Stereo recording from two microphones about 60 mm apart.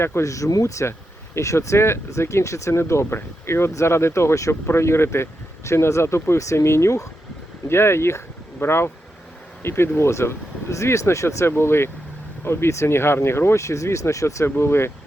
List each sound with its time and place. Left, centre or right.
0.0 s speech: left
0.3 s speech: left
7.7 s speech: left
14.4 s speech: left